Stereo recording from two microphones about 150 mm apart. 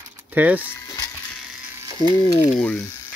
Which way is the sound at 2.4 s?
10° left (ahead or behind).